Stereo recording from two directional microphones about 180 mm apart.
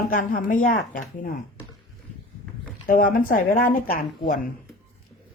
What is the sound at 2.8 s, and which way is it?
Speech, 50° left (ahead or behind).